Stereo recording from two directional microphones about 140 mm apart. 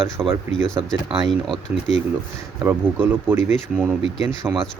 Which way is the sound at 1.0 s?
35° right (ahead or behind).